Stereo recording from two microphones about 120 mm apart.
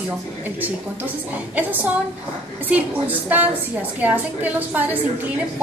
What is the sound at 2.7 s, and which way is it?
A woman's voice, 15° right (ahead or behind).